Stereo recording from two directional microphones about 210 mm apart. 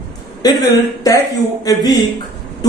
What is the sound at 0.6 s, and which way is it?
A man's voice, 15° left (ahead or behind).